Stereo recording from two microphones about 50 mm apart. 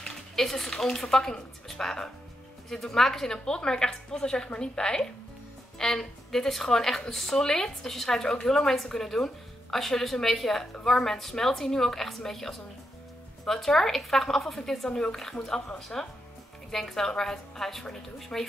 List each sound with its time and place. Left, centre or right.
0.0 s a woman's voice: centre